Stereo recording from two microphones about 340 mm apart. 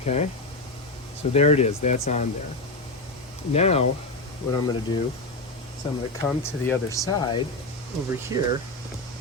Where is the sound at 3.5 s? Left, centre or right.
Centre.